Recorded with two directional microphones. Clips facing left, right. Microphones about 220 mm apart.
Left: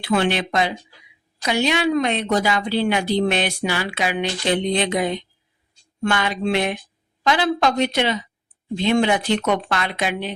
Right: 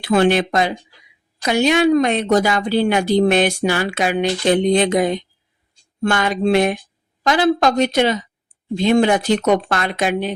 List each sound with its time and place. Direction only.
0.0 s a woman's voice: 45° right (ahead or behind)